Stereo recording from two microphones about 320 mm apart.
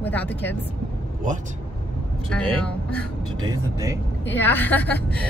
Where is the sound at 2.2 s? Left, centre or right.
Centre.